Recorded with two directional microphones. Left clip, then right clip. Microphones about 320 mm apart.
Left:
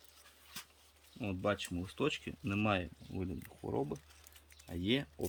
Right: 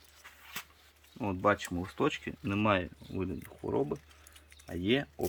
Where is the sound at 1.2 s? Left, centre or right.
Centre.